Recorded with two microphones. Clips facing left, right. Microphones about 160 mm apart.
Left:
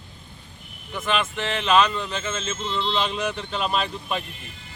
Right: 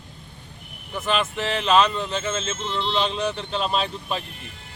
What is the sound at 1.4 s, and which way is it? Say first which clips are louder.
Speech: right 2 dB; 35° right (ahead or behind).